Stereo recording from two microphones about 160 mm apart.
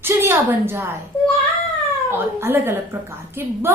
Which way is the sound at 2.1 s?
15° right (ahead or behind).